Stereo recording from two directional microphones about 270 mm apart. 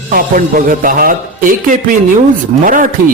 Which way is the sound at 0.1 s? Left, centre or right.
Right.